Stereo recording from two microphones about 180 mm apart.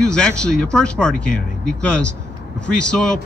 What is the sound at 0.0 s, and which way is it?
Speech, 5° left (ahead or behind).